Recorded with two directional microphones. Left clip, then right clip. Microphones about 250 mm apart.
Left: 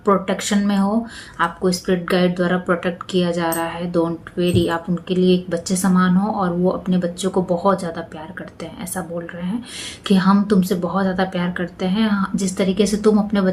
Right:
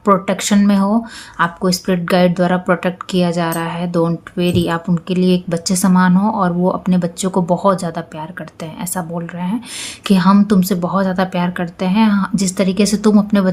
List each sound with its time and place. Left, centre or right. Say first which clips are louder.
0.0 s speech: right 4 dB; right